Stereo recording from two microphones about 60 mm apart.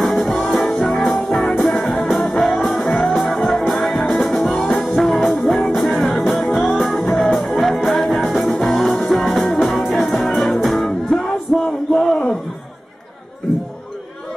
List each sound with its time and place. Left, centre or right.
0.0 s music: centre
0.7 s music: centre
1.0 s music: centre
5.2 s music: centre
5.5 s music: centre
12.0 s a sound: centre